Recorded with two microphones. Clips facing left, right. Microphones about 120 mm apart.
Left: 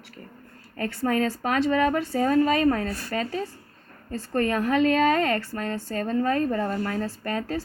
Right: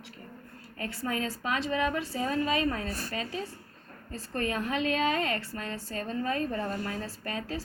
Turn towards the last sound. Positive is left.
turn(degrees=50)  # may be behind; listen again after turning